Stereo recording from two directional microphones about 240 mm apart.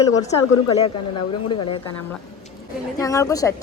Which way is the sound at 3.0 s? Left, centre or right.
Centre.